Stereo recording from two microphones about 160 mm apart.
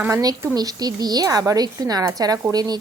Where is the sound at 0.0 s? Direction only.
20° right (ahead or behind).